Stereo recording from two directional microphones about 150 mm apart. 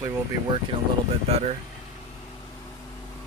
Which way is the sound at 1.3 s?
45° right (ahead or behind).